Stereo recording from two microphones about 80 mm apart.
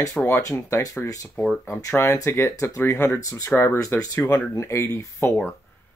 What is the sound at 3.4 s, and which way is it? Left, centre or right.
Speech, left.